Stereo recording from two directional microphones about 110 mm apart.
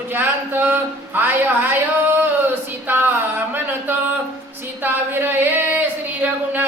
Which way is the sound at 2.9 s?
20° right (ahead or behind).